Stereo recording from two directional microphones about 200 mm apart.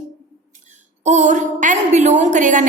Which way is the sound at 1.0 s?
35° right (ahead or behind).